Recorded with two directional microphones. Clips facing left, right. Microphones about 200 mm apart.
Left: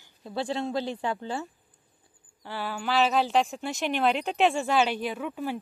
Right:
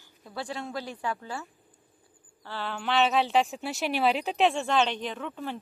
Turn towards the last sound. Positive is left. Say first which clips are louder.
# left 3 dB
turn(degrees=10)  # may be behind; listen again after turning